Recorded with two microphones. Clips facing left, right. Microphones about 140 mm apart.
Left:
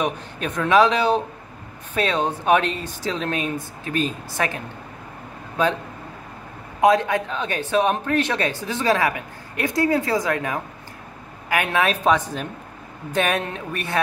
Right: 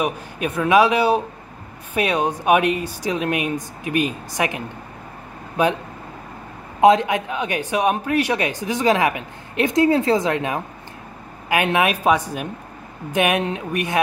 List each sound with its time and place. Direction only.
0.0 s a man's voice: 10° right (ahead or behind)
6.8 s a man's voice: 20° right (ahead or behind)